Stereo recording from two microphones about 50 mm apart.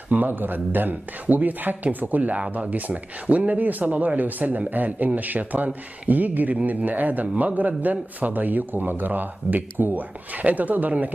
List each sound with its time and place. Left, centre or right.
0.1 s speech: right